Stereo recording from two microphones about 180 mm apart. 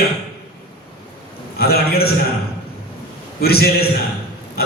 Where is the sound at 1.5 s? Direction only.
60° left (ahead or behind).